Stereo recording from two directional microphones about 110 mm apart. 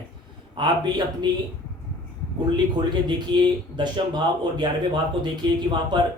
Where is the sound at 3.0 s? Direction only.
45° right (ahead or behind).